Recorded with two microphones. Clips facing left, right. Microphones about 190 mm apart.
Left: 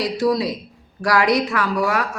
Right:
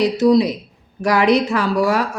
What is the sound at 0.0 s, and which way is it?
A woman's voice, 20° right (ahead or behind).